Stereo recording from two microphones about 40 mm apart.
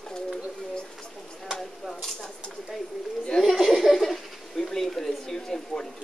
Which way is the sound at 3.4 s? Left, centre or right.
Centre.